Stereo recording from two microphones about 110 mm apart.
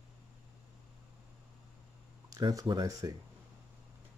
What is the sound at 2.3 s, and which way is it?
Speech, 30° right (ahead or behind).